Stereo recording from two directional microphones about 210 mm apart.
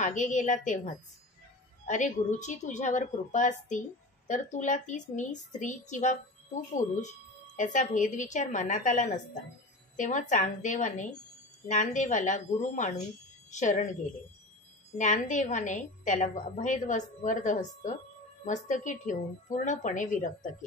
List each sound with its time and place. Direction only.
0.0 s a woman's voice: 35° left (ahead or behind)
15.0 s a woman's voice: 35° left (ahead or behind)